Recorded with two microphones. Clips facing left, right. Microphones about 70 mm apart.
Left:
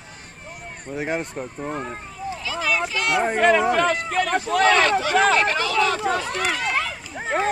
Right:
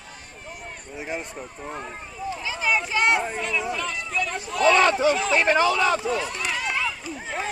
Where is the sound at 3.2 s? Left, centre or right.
Left.